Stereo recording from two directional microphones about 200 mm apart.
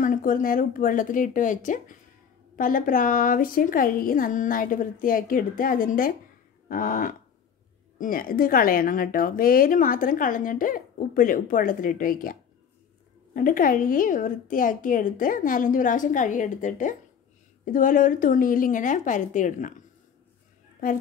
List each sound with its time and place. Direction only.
0.0 s a woman's voice: 40° left (ahead or behind)